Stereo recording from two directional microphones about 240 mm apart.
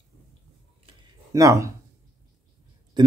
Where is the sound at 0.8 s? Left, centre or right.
Centre.